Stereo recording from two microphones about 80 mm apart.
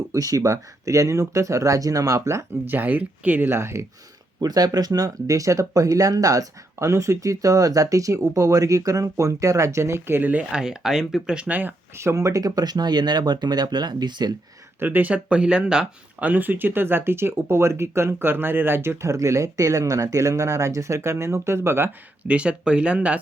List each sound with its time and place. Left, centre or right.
0.1 s speech: right
2.6 s speech: right
3.6 s speech: right
4.4 s speech: right
10.5 s speech: centre
11.9 s speech: right
14.8 s speech: right
16.2 s speech: right
22.2 s speech: centre